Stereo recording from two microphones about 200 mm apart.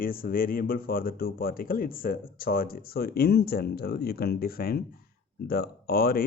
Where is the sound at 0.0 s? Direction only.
45° left (ahead or behind).